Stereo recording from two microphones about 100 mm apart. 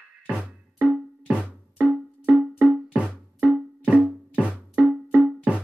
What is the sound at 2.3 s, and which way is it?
Music, 10° right (ahead or behind).